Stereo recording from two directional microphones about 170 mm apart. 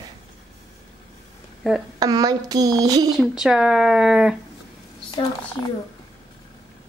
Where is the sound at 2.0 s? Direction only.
20° right (ahead or behind).